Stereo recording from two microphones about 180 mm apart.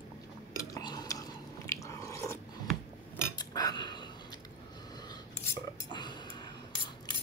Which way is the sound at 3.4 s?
20° left (ahead or behind).